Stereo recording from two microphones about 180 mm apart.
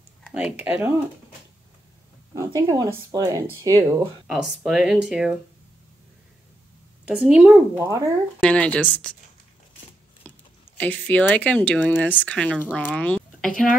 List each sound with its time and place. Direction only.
0.2 s a sound: 5° right (ahead or behind)
0.7 s speech: 10° right (ahead or behind)
2.3 s speech: 20° right (ahead or behind)
4.3 s speech: centre (ahead or behind)
7.1 s speech: 5° right (ahead or behind)
8.4 s speech: 5° left (ahead or behind)
10.3 s a sound: 10° left (ahead or behind)
10.8 s speech: 10° left (ahead or behind)